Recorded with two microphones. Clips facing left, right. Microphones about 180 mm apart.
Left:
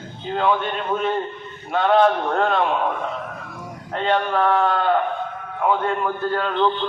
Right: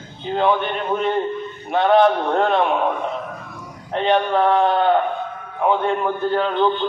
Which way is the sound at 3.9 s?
20° right (ahead or behind).